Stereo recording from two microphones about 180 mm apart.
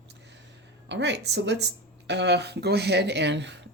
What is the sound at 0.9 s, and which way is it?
Speech, 75° right (ahead or behind).